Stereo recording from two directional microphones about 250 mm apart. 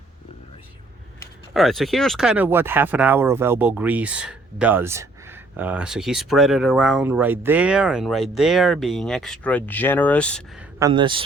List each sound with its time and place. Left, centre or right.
1.5 s speech: centre
10.8 s a man's voice: centre